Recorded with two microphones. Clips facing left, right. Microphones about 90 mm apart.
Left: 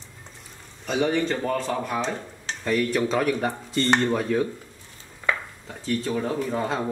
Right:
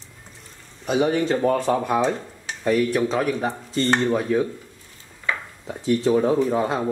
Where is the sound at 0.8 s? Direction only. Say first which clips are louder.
Right 3 dB; 10° right (ahead or behind).